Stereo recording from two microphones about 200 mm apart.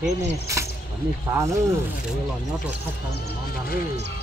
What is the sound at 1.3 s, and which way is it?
Speech, 15° right (ahead or behind).